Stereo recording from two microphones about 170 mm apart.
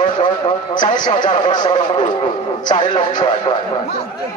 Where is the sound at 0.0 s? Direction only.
30° left (ahead or behind).